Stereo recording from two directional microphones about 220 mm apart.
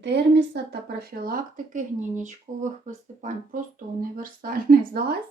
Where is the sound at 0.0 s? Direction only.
50° right (ahead or behind).